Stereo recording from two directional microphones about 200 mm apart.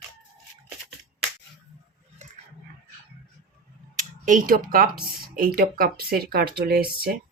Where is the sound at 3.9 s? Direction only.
40° right (ahead or behind).